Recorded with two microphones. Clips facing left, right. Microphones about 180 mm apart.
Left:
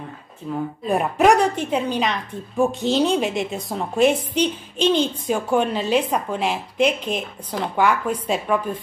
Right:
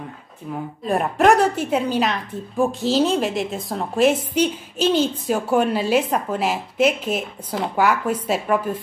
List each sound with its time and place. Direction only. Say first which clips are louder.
0.8 s a woman's voice: even; centre (ahead or behind)